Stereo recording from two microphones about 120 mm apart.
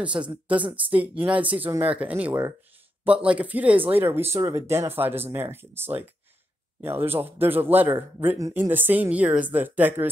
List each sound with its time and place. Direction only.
0.2 s a man's voice: 15° right (ahead or behind)